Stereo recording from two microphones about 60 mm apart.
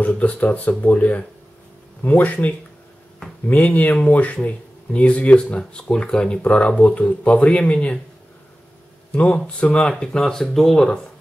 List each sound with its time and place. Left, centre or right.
0.0 s speech: left
9.1 s speech: left; by 11.0 s centre